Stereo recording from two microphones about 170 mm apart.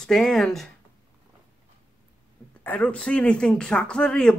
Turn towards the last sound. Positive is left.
turn(degrees=5)  # may be behind; listen again after turning